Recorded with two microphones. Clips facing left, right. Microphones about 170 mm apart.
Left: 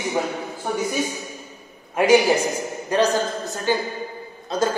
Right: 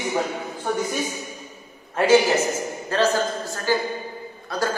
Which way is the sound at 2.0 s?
15° left (ahead or behind).